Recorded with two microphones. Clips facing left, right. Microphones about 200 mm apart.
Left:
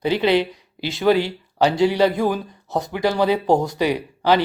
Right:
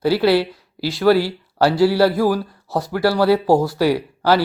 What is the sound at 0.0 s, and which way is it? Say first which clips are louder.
Speech: right 2 dB; 5° right (ahead or behind).